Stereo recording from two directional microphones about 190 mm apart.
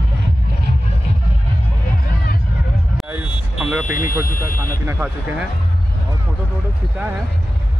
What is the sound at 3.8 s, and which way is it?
Speech, 45° left (ahead or behind).